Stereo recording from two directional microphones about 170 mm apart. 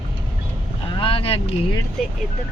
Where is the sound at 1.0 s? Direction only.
35° left (ahead or behind).